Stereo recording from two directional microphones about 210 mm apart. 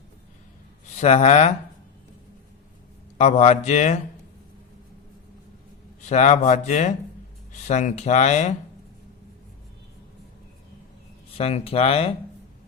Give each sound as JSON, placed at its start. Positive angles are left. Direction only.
{"t": 0.9, "sound": "speech", "side_deg": 30}
{"t": 3.2, "sound": "speech", "side_deg": 30}
{"t": 6.1, "sound": "speech", "side_deg": 35}
{"t": 11.3, "sound": "speech", "side_deg": 30}